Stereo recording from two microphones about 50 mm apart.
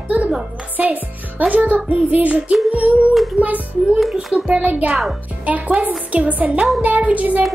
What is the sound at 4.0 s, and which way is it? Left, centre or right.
Speech, centre.